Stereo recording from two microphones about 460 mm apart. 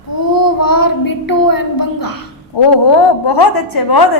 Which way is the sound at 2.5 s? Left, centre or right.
Left.